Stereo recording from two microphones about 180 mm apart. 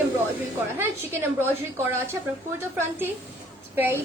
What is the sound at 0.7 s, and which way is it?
A woman's voice, 15° right (ahead or behind).